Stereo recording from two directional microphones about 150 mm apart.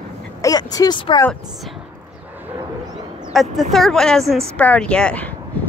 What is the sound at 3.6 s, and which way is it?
A woman's voice, centre (ahead or behind).